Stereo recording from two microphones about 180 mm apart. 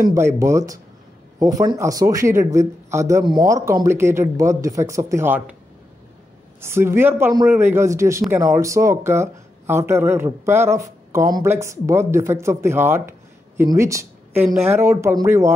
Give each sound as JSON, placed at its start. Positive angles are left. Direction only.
{"t": 0.1, "sound": "speech", "side_deg": -15}
{"t": 6.6, "sound": "speech", "side_deg": -15}